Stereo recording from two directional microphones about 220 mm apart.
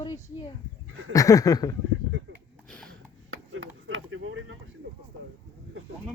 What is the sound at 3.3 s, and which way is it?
Chop, 65° right (ahead or behind).